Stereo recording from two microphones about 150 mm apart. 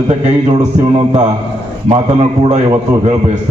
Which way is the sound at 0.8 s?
40° right (ahead or behind).